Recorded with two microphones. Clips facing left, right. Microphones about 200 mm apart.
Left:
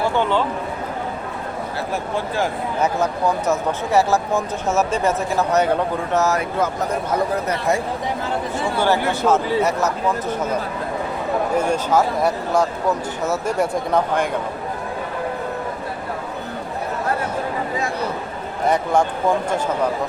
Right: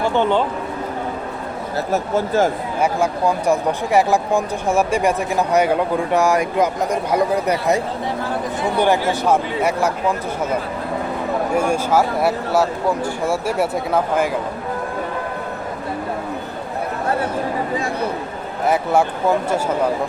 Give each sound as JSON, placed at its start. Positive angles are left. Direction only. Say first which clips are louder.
{"t": 1.9, "sound": "speech", "louder": "right 7 dB", "side_deg": -45}
{"t": 2.8, "sound": "speech", "louder": "right 2 dB", "side_deg": -10}
{"t": 8.8, "sound": "speech", "louder": "right 1 dB", "side_deg": -15}
{"t": 11.5, "sound": "speech", "louder": "right 1 dB", "side_deg": -10}
{"t": 18.6, "sound": "speech", "louder": "right 1 dB", "side_deg": -5}